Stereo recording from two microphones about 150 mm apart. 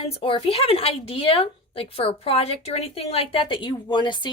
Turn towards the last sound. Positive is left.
turn(degrees=30)  # may be behind; listen again after turning